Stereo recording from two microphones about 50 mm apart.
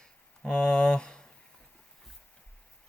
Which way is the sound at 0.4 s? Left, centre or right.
Centre.